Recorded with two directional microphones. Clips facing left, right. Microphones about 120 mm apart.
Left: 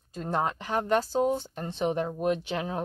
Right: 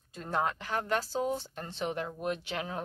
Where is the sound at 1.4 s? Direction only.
20° left (ahead or behind).